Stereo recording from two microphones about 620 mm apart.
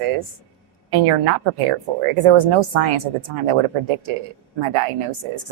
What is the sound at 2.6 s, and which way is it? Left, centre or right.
Speech, right.